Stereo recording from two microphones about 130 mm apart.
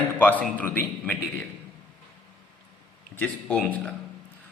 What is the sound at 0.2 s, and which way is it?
A man's voice, 15° left (ahead or behind).